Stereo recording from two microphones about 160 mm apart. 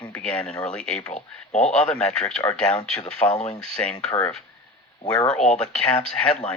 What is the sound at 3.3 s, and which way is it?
Speech, 45° left (ahead or behind).